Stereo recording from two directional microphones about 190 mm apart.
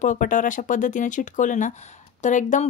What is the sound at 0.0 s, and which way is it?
A woman's voice, 45° left (ahead or behind).